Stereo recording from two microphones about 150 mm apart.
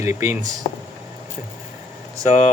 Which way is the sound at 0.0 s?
20° right (ahead or behind).